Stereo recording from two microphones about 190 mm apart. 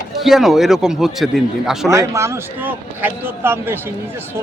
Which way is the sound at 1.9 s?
15° right (ahead or behind).